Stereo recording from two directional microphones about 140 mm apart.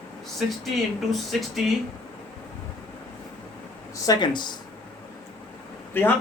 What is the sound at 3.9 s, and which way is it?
Speech, 30° left (ahead or behind).